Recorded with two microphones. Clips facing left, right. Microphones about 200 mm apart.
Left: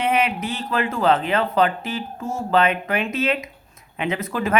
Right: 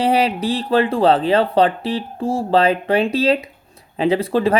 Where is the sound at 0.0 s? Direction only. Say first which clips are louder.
Right 5 dB; 35° right (ahead or behind).